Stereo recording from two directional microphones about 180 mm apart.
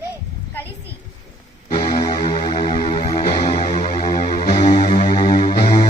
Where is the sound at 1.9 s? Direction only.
25° left (ahead or behind).